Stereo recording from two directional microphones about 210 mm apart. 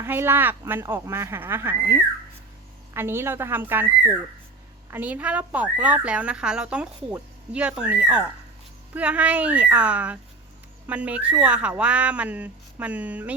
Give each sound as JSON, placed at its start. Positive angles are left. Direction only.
{"t": 0.0, "sound": "speech", "side_deg": -10}